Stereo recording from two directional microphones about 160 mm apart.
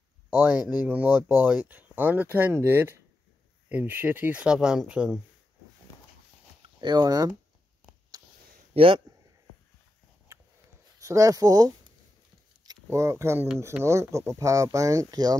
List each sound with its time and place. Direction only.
0.3 s speech: 10° right (ahead or behind)
6.8 s speech: 25° right (ahead or behind)
8.1 s a sound: 25° right (ahead or behind)
8.7 s speech: 35° right (ahead or behind)
11.0 s speech: 20° right (ahead or behind)